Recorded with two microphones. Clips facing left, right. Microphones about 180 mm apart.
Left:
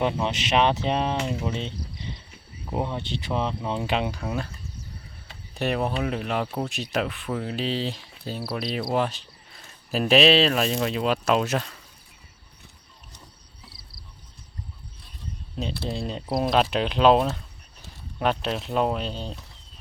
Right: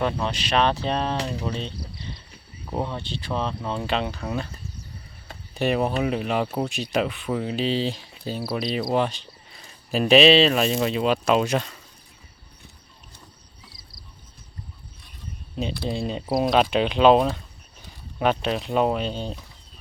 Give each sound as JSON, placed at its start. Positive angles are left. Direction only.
{"t": 0.0, "sound": "speech", "side_deg": 20}
{"t": 5.5, "sound": "speech", "side_deg": 0}
{"t": 15.6, "sound": "speech", "side_deg": 0}